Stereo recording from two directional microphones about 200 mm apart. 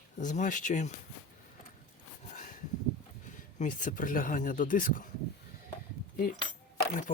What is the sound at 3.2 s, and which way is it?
Speech, 40° left (ahead or behind).